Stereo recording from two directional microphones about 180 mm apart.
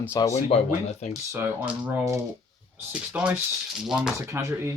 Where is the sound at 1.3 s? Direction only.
10° right (ahead or behind).